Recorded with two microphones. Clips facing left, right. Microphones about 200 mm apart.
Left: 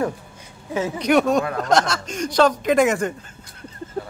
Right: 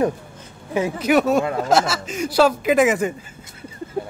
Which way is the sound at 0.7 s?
10° right (ahead or behind).